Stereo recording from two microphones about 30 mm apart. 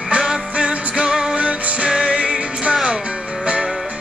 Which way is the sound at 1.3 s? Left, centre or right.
Right.